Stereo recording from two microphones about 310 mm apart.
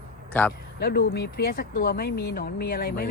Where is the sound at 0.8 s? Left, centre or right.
Left.